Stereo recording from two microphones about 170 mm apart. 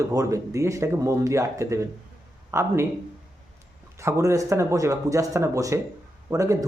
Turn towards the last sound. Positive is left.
turn(degrees=-20)  # may be behind; listen again after turning